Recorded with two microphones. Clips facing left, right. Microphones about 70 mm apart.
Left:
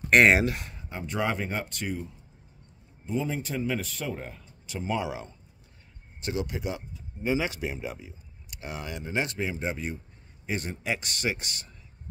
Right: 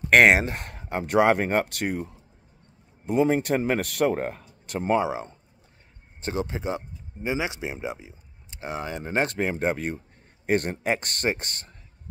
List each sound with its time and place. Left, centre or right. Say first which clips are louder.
0.3 s speech: right 2 dB; right
0.6 s speech: right 7 dB; right
3.1 s speech: right 9 dB; right
5.0 s speech: right 6 dB; right
7.2 s a man's voice: even; centre; by 11.7 s right